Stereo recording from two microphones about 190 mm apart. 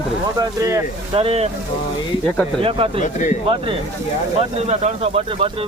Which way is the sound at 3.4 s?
30° right (ahead or behind).